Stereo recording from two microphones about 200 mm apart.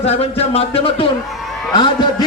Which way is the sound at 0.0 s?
30° left (ahead or behind).